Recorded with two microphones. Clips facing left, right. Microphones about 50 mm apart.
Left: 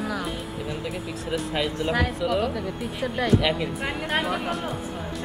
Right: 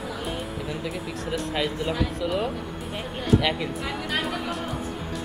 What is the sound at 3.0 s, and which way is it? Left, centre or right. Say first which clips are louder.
Speech: left 8 dB; left.